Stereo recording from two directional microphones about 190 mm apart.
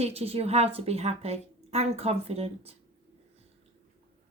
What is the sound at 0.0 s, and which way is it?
Speech, 30° right (ahead or behind).